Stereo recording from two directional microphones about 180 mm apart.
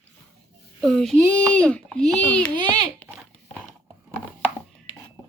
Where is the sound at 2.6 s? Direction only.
25° right (ahead or behind).